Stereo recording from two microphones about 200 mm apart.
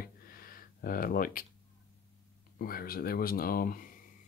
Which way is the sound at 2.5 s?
45° left (ahead or behind).